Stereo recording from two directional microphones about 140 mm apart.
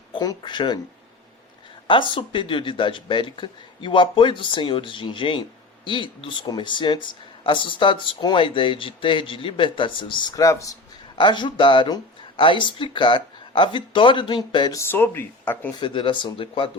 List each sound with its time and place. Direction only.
0.1 s speech: 30° left (ahead or behind)
1.9 s speech: 35° left (ahead or behind)
11.2 s speech: 35° left (ahead or behind); by 15.7 s 15° left (ahead or behind)
15.8 s speech: 35° left (ahead or behind)